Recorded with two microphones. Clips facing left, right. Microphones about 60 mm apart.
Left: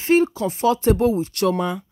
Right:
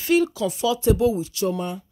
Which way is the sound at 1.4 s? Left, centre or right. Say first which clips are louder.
Left 5 dB; left.